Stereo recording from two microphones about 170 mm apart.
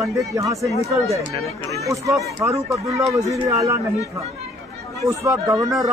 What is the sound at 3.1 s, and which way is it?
Speech, 15° right (ahead or behind).